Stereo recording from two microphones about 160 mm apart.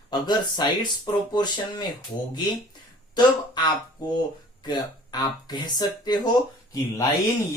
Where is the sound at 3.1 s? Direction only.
25° left (ahead or behind).